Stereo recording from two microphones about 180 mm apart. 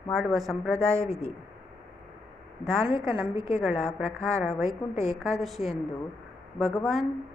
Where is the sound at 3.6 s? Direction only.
Centre (ahead or behind).